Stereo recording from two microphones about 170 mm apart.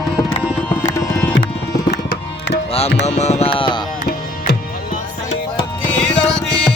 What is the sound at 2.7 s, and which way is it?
Music, 40° left (ahead or behind).